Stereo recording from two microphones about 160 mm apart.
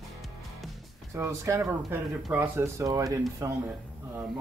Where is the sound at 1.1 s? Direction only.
15° right (ahead or behind).